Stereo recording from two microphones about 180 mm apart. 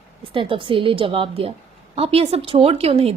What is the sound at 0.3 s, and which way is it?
A woman's voice, 30° right (ahead or behind).